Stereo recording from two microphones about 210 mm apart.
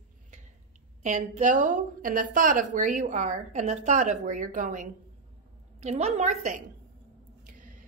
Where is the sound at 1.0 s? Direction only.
35° right (ahead or behind).